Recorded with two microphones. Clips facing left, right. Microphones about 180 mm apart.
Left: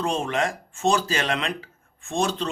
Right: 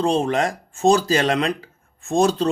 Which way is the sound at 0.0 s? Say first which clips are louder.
Right 5 dB; 35° right (ahead or behind).